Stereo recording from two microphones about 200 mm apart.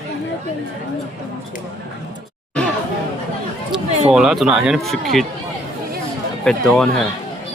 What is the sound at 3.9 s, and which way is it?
Speech, 35° right (ahead or behind).